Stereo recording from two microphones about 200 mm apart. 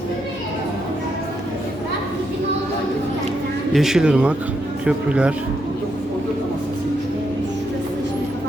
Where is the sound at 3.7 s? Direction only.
Centre (ahead or behind).